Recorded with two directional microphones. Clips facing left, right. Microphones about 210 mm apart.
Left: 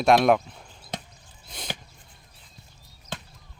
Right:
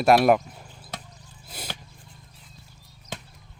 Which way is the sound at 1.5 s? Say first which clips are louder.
Right 1 dB; 5° right (ahead or behind).